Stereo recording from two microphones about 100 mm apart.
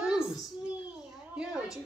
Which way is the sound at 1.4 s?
5° right (ahead or behind).